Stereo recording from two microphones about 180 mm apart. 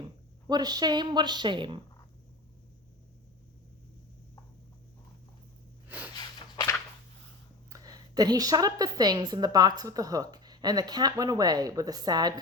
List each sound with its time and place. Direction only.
0.0 s speech: 25° right (ahead or behind)
6.1 s a sound: 25° left (ahead or behind)
7.7 s a woman's voice: 20° right (ahead or behind)